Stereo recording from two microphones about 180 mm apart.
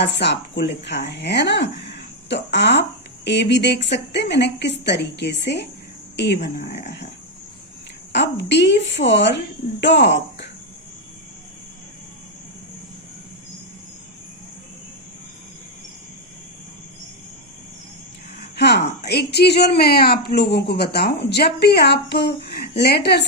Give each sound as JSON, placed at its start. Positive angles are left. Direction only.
{"t": 0.0, "sound": "a woman's voice", "side_deg": 70}
{"t": 1.9, "sound": "a sound", "side_deg": 70}
{"t": 3.2, "sound": "a woman's voice", "side_deg": 70}
{"t": 8.1, "sound": "a woman's voice", "side_deg": 75}
{"t": 18.5, "sound": "a woman's voice", "side_deg": 70}